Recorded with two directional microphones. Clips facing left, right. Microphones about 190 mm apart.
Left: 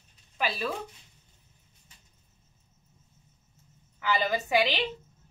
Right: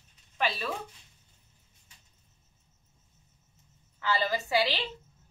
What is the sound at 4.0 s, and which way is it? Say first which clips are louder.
Speech: left 2 dB; 15° left (ahead or behind).